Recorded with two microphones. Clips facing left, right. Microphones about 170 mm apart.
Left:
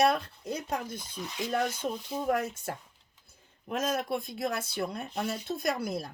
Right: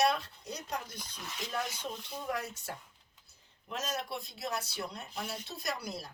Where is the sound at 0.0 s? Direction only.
50° left (ahead or behind).